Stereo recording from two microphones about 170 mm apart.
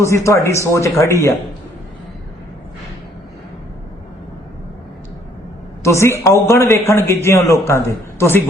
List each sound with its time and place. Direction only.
0.0 s a man's voice: 15° left (ahead or behind)
5.8 s a man's voice: 15° left (ahead or behind)